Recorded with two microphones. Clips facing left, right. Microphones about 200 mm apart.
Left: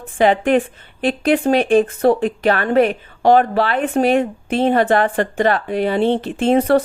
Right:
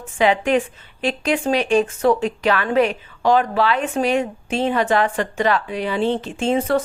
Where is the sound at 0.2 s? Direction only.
50° left (ahead or behind).